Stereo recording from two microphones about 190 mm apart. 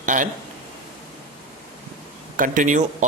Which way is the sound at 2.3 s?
45° right (ahead or behind).